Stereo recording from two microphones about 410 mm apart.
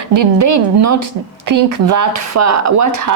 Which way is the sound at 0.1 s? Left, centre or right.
Right.